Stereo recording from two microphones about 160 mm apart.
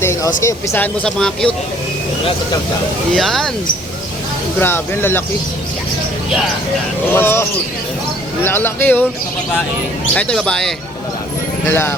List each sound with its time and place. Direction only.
0.0 s speech: 15° left (ahead or behind)
3.2 s speech: centre (ahead or behind)
4.6 s speech: 15° left (ahead or behind)
7.1 s speech: 15° left (ahead or behind)
8.4 s speech: 15° left (ahead or behind)
10.2 s speech: 5° left (ahead or behind)
11.6 s speech: 15° left (ahead or behind)